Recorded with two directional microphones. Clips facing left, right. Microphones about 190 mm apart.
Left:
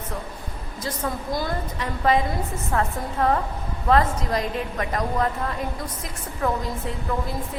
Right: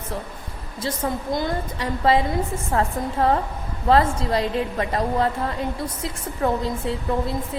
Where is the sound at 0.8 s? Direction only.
25° right (ahead or behind).